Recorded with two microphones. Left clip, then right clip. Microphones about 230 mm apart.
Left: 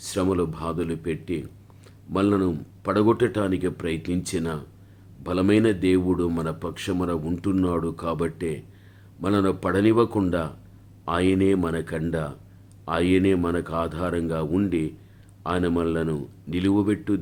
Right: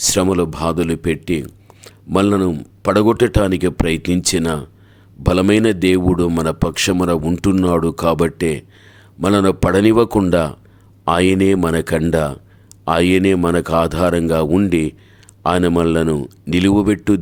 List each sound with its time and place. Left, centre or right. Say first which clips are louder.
0.0 s speech: right 9 dB; right